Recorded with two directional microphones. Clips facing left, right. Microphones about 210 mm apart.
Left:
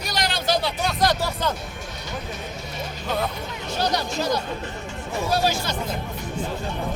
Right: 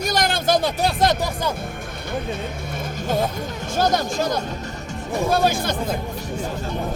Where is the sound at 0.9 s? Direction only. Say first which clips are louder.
Right 1 dB; 25° right (ahead or behind).